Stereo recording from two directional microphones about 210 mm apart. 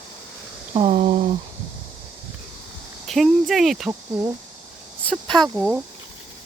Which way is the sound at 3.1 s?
Centre (ahead or behind).